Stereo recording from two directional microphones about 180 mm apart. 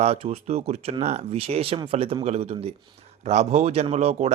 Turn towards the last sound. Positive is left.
turn(degrees=-35)  # may be behind; listen again after turning